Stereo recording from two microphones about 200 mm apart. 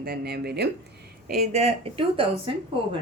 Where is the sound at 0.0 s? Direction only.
50° right (ahead or behind).